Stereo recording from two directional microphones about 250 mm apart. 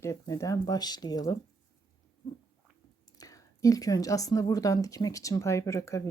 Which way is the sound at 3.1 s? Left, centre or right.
Centre.